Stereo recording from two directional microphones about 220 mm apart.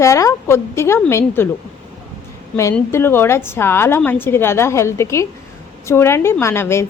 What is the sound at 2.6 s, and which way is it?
Speech, 10° left (ahead or behind).